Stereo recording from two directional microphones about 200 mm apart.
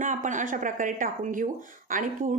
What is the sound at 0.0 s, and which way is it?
A woman's voice, 40° right (ahead or behind).